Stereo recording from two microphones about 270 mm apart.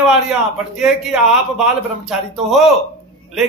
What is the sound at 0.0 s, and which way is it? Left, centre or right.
A man's voice, centre.